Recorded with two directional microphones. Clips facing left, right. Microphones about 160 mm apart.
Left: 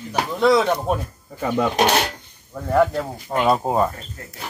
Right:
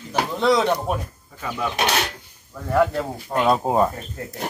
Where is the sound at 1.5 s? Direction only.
40° left (ahead or behind).